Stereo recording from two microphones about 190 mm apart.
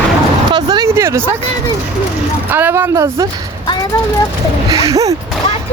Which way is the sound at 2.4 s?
10° right (ahead or behind).